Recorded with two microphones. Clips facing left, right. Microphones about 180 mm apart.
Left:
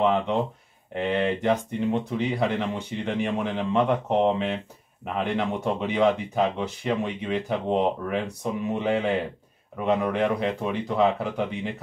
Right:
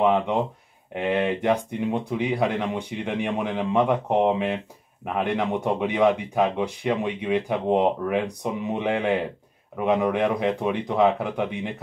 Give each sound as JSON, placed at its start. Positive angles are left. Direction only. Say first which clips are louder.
{"t": 0.0, "sound": "speech", "louder": "right 2 dB", "side_deg": -15}
{"t": 10.4, "sound": "speech", "louder": "right 3 dB", "side_deg": -20}